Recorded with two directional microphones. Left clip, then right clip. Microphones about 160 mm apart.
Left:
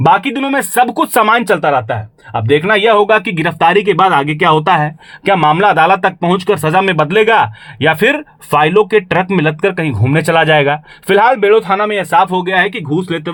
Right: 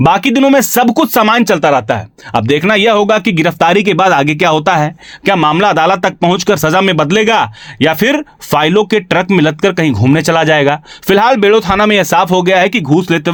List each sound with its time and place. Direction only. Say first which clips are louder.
0.0 s speech: right 2 dB; 40° right (ahead or behind)
1.0 s speech: right 1 dB; 20° right (ahead or behind)
11.9 s speech: right 2 dB; 45° right (ahead or behind)